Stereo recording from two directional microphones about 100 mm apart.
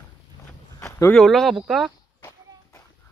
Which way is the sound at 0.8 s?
25° left (ahead or behind).